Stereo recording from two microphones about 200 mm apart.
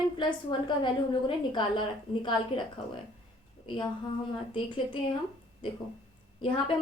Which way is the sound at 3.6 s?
25° left (ahead or behind).